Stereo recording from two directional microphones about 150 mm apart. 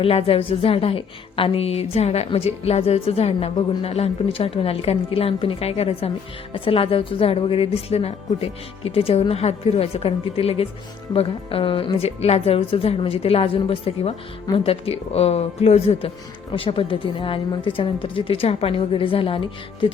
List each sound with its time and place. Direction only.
0.0 s a woman's voice: 40° left (ahead or behind)